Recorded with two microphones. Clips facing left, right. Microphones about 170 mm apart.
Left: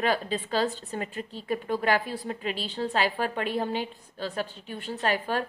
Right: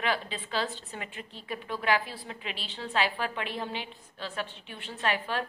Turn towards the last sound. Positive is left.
turn(degrees=45)  # may be behind; listen again after turning